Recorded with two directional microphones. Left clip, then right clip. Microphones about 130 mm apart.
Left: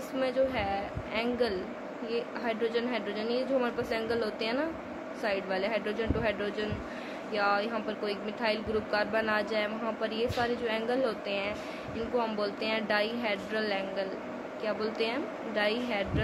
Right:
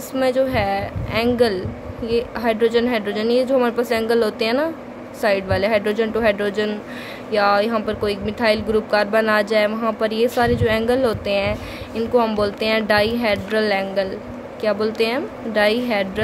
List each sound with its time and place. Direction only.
0.2 s speech: 70° right (ahead or behind)